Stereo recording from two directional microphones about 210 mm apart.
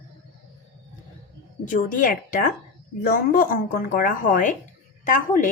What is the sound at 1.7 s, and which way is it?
A woman's voice, 40° left (ahead or behind).